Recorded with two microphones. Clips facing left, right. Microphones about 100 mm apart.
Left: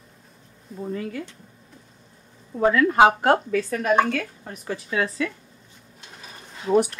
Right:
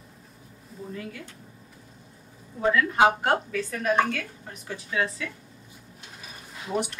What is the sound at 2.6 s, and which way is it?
A woman's voice, 55° left (ahead or behind).